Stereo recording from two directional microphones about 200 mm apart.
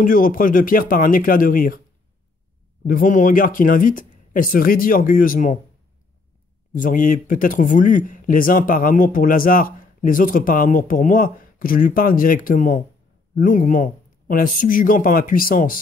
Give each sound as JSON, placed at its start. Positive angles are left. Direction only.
{"t": 0.0, "sound": "speech", "side_deg": 45}
{"t": 2.9, "sound": "speech", "side_deg": 40}
{"t": 6.7, "sound": "speech", "side_deg": 40}